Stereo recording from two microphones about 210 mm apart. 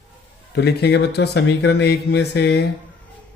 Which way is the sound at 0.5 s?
50° left (ahead or behind).